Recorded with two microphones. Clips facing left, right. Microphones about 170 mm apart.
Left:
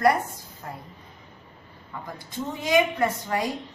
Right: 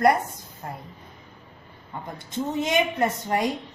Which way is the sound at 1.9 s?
25° right (ahead or behind).